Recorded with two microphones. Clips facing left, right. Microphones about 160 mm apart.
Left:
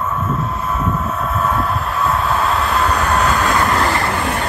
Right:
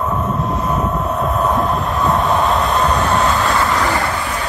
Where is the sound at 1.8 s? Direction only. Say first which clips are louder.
Right 2 dB; centre (ahead or behind).